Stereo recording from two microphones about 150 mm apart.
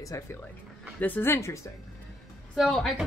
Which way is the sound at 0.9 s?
10° left (ahead or behind).